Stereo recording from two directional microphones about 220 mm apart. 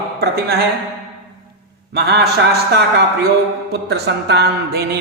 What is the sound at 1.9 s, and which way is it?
Speech, 50° right (ahead or behind).